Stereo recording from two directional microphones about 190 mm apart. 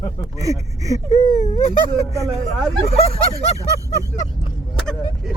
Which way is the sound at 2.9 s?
30° left (ahead or behind).